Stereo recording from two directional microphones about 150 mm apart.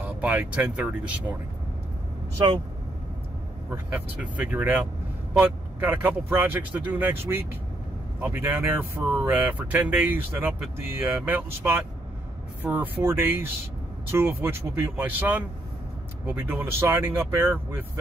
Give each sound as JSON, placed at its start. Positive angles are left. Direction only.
{"t": 0.0, "sound": "speech", "side_deg": -10}
{"t": 3.7, "sound": "speech", "side_deg": -10}